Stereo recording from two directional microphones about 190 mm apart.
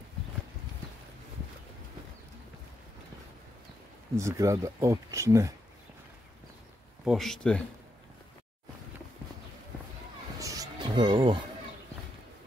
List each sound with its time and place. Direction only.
4.2 s speech: 15° right (ahead or behind)
7.1 s speech: centre (ahead or behind)
10.4 s music: 20° right (ahead or behind)